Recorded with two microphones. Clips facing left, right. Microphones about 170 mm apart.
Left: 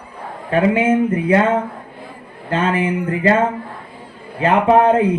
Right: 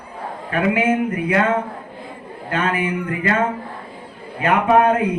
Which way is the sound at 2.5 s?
30° left (ahead or behind).